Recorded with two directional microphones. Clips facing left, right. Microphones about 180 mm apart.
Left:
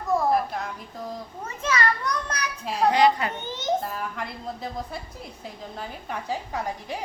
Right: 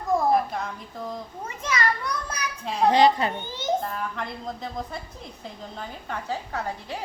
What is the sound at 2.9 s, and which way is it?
Speech, 30° right (ahead or behind).